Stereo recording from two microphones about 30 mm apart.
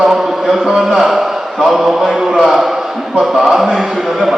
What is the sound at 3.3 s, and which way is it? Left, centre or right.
Speech, centre.